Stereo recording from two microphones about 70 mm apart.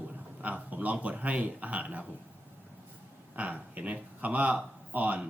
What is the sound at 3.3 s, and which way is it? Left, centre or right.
Speech, right.